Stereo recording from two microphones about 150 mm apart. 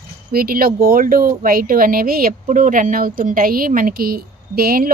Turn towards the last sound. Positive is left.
turn(degrees=-80)